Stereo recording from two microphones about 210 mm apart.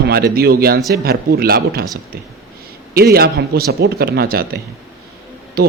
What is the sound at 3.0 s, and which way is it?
A man's voice, 45° right (ahead or behind).